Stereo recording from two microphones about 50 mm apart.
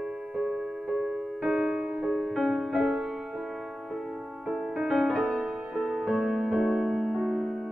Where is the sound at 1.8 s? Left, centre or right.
Right.